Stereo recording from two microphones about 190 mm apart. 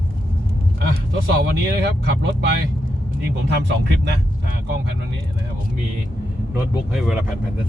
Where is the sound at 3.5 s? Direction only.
65° right (ahead or behind).